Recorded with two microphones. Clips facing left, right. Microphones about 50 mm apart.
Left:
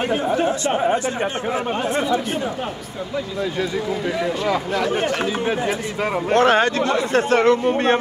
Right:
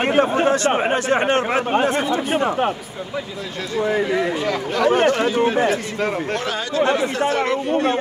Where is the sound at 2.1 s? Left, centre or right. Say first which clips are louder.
Right 3 dB; right.